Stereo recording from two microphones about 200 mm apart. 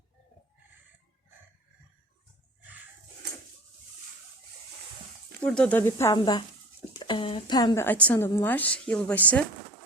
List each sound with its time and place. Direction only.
5.4 s a woman's voice: 5° left (ahead or behind); by 7.9 s 20° left (ahead or behind)
7.9 s a woman's voice: 10° left (ahead or behind)